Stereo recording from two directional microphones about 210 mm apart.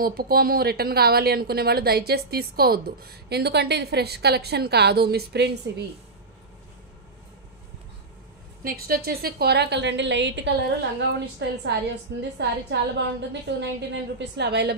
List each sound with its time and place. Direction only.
0.0 s a woman's voice: 45° right (ahead or behind)
8.6 s a woman's voice: 45° right (ahead or behind)